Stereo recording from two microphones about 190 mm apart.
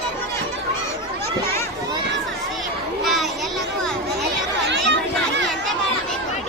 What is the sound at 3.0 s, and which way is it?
Children playing, centre (ahead or behind).